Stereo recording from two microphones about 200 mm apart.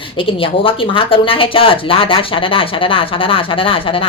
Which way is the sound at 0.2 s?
25° left (ahead or behind).